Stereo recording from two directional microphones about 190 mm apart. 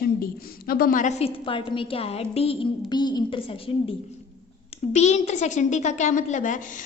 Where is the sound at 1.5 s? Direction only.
25° left (ahead or behind).